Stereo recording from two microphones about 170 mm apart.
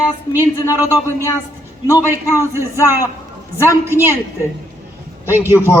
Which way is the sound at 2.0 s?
15° right (ahead or behind).